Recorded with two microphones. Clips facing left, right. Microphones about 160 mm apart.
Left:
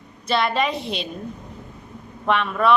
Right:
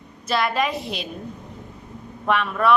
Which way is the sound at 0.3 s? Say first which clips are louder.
Left 1 dB; centre (ahead or behind).